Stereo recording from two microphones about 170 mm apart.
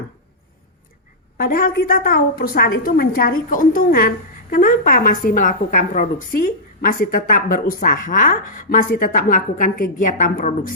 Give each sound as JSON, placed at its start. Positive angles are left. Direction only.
{"t": 1.4, "sound": "a woman's voice", "side_deg": 60}